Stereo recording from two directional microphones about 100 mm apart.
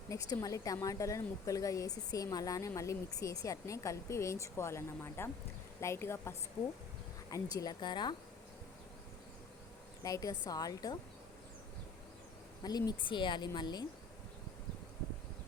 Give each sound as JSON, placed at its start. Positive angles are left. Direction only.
{"t": 0.1, "sound": "a woman's voice", "side_deg": 30}
{"t": 7.5, "sound": "a woman's voice", "side_deg": 40}
{"t": 10.0, "sound": "a woman's voice", "side_deg": 35}
{"t": 12.6, "sound": "a woman's voice", "side_deg": 40}